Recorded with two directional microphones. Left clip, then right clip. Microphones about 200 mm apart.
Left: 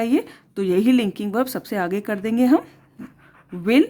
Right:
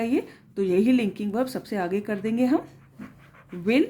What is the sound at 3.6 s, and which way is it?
Speech, 45° left (ahead or behind).